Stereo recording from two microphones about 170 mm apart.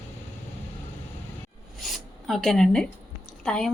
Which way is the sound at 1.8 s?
Centre (ahead or behind).